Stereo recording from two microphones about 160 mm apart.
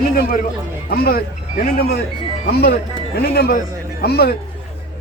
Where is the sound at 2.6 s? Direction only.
85° left.